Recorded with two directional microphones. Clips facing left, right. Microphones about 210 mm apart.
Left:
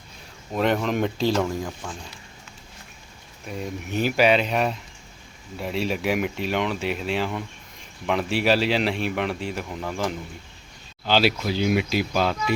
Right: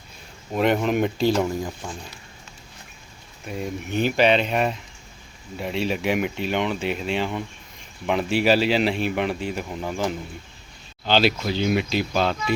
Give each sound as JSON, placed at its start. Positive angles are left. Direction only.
{"t": 0.5, "sound": "speech", "side_deg": -5}
{"t": 3.4, "sound": "speech", "side_deg": 0}